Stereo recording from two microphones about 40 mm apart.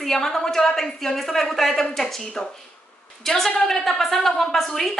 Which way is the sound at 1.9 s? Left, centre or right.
Centre.